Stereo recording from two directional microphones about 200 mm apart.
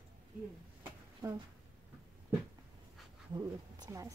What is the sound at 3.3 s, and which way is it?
Speech, 20° right (ahead or behind).